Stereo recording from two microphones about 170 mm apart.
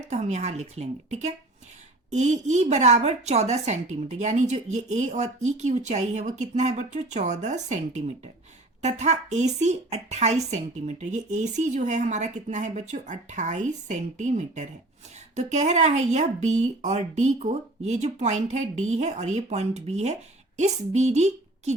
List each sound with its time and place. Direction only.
0.1 s a woman's voice: 40° right (ahead or behind)